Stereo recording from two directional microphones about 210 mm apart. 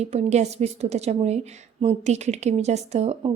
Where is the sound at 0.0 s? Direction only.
30° right (ahead or behind).